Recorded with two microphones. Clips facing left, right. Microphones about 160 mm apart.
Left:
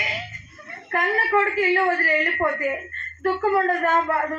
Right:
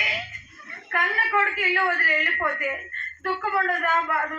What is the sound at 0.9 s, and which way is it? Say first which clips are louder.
A man's voice: left 5 dB; 35° left (ahead or behind).